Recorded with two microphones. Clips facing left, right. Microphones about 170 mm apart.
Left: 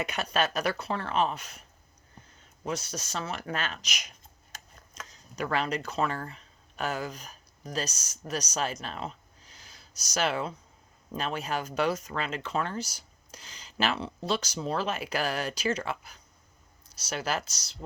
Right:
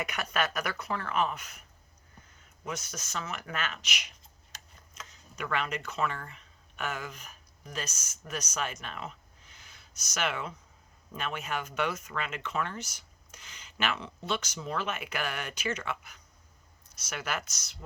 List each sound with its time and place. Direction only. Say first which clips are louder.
0.0 s speech: left 3 dB; 30° left (ahead or behind)
2.6 s speech: left 5 dB; 30° left (ahead or behind)